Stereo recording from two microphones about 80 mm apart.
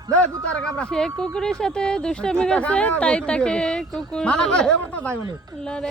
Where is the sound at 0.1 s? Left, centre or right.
Centre.